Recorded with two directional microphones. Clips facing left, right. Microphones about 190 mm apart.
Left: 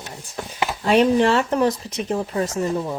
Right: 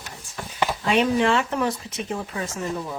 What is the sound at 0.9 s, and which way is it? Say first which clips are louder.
Speech: left 5 dB; 40° left (ahead or behind).